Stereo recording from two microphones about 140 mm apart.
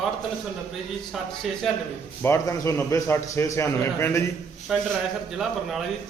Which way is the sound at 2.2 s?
20° left (ahead or behind).